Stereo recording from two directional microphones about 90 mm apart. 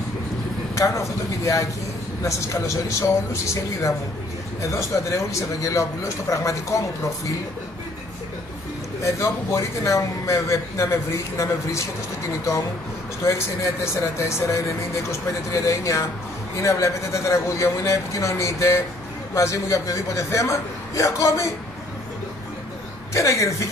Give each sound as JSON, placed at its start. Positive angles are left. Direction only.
{"t": 0.7, "sound": "a man's voice", "side_deg": 35}
{"t": 9.0, "sound": "a man's voice", "side_deg": 35}
{"t": 13.2, "sound": "a man's voice", "side_deg": 35}
{"t": 23.1, "sound": "a man's voice", "side_deg": 35}